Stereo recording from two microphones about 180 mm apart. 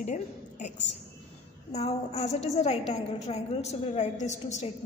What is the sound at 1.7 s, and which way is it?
A woman's voice, 35° left (ahead or behind).